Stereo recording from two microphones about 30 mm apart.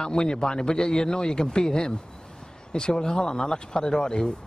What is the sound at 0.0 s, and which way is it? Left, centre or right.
Speech, left.